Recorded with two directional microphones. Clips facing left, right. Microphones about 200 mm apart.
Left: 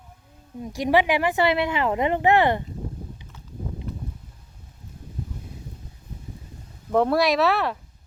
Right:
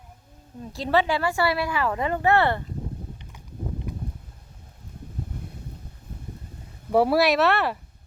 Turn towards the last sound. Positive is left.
turn(degrees=0)  # may be behind; listen again after turning